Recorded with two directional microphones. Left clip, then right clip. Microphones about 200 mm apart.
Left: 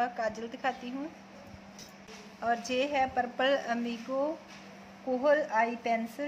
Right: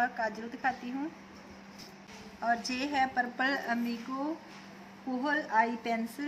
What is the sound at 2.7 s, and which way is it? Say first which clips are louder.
A woman's voice: left 2 dB; 20° left (ahead or behind).